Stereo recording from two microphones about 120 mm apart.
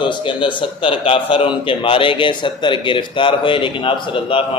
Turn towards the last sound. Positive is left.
turn(degrees=45)  # may be behind; listen again after turning